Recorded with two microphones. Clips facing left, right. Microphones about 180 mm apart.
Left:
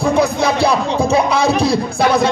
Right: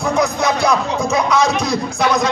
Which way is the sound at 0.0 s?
30° left (ahead or behind).